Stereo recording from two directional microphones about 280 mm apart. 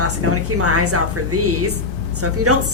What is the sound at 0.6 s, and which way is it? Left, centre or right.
A woman's voice, right.